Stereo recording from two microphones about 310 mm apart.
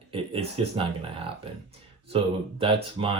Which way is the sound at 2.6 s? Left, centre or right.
Centre.